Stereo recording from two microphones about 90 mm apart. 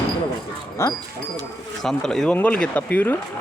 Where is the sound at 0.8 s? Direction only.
30° left (ahead or behind).